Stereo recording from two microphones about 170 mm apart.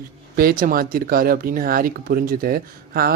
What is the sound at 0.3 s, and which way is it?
Speech, 55° right (ahead or behind).